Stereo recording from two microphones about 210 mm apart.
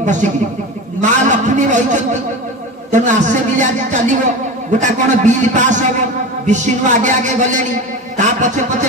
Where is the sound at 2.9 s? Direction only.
35° right (ahead or behind).